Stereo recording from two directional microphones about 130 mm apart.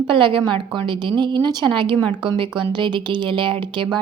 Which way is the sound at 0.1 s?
40° right (ahead or behind).